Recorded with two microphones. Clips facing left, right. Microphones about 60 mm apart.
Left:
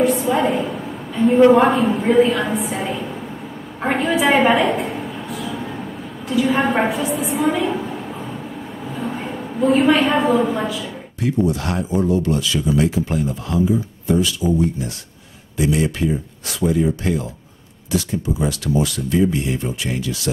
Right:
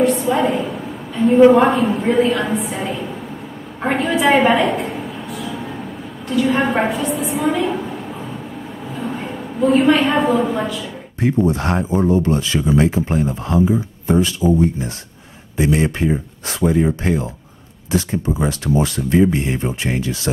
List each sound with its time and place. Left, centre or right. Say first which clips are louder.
0.0 s a woman's voice: right 1 dB; centre
3.8 s a sound: right 1 dB; centre
11.1 s speech: right 2 dB; right